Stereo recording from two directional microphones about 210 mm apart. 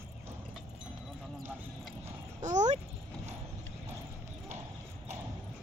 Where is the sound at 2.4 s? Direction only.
35° right (ahead or behind).